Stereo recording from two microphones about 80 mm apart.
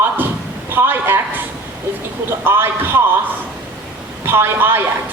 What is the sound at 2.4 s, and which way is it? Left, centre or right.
Speech, right.